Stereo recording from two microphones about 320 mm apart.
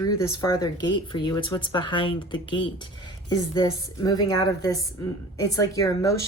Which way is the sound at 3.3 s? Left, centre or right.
Centre.